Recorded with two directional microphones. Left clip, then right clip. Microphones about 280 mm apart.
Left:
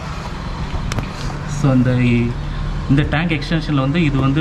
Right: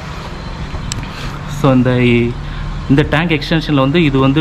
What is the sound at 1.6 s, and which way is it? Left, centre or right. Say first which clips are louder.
Speech: right 6 dB; centre.